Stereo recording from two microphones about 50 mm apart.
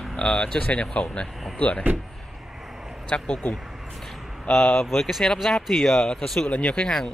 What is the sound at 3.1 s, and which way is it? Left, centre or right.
Speech, centre.